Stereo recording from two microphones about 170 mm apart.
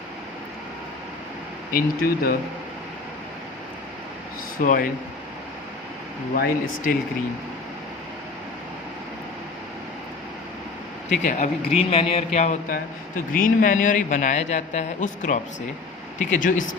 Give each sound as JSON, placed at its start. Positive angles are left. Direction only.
{"t": 1.7, "sound": "speech", "side_deg": 60}
{"t": 4.5, "sound": "a man's voice", "side_deg": 55}
{"t": 6.3, "sound": "speech", "side_deg": 65}
{"t": 11.3, "sound": "a man's voice", "side_deg": 45}